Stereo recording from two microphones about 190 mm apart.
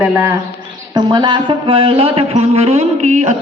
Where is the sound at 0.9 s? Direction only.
20° right (ahead or behind).